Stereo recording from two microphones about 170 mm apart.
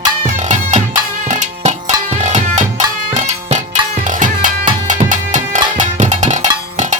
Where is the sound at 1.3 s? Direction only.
45° right (ahead or behind).